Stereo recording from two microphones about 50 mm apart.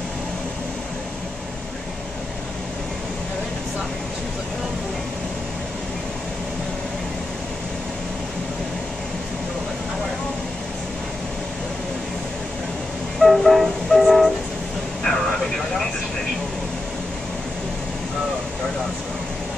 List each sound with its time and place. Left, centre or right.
13.2 s train: centre